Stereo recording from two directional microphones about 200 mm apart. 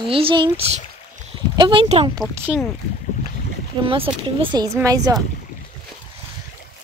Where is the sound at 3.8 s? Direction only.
25° right (ahead or behind).